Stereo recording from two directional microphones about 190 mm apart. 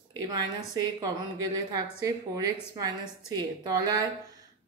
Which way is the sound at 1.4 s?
20° right (ahead or behind).